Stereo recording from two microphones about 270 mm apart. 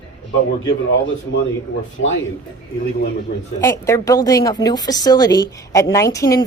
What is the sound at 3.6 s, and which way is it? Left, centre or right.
A woman's voice, centre.